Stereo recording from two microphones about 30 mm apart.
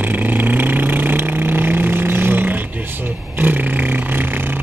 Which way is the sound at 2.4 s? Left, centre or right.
Right.